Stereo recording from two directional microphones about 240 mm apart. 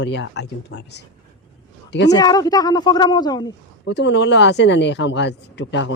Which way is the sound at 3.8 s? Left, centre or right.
Left.